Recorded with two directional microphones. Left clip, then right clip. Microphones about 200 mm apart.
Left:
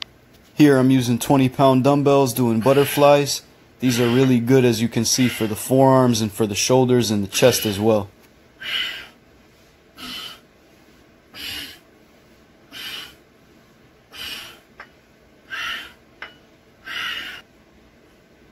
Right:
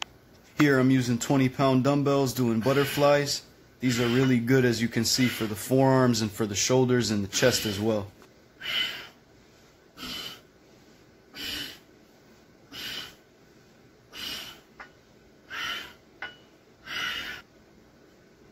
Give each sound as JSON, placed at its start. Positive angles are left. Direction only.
{"t": 0.6, "sound": "speech", "side_deg": 20}
{"t": 2.6, "sound": "speech", "side_deg": 0}
{"t": 3.0, "sound": "speech", "side_deg": 20}
{"t": 7.5, "sound": "speech", "side_deg": 0}
{"t": 8.5, "sound": "a sound", "side_deg": 0}
{"t": 9.9, "sound": "gasp", "side_deg": 0}
{"t": 11.3, "sound": "a sound", "side_deg": 0}
{"t": 15.4, "sound": "gasp", "side_deg": 0}
{"t": 16.8, "sound": "a sound", "side_deg": 0}